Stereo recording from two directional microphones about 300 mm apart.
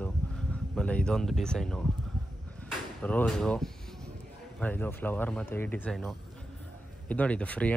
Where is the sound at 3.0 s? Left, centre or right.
Centre.